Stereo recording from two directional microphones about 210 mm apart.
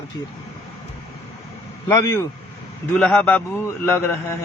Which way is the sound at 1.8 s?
15° left (ahead or behind).